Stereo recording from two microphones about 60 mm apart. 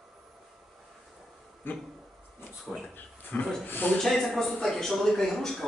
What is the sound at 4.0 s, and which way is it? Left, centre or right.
Speech, centre.